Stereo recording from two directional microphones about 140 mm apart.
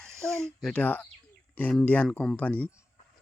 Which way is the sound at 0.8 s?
10° left (ahead or behind).